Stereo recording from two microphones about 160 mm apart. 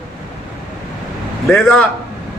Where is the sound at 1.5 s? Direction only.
5° left (ahead or behind).